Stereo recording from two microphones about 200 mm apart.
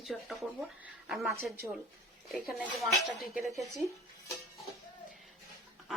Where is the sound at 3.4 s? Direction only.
15° right (ahead or behind).